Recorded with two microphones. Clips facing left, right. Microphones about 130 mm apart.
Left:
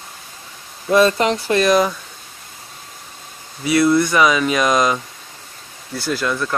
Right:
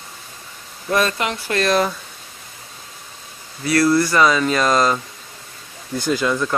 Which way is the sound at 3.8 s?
Centre (ahead or behind).